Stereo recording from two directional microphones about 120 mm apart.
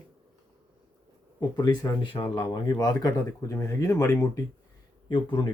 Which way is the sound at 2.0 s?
50° left (ahead or behind).